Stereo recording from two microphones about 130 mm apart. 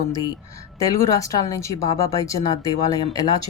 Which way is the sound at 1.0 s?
25° left (ahead or behind).